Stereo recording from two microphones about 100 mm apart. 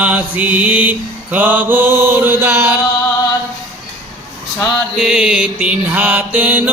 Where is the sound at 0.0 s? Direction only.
15° right (ahead or behind).